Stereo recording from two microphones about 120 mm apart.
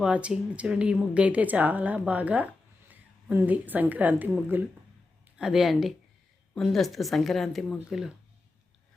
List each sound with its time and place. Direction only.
0.0 s a woman's voice: 10° right (ahead or behind)
5.4 s speech: 5° right (ahead or behind)